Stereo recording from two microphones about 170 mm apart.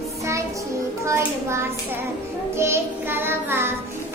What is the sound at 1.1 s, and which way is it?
Hands, 15° right (ahead or behind).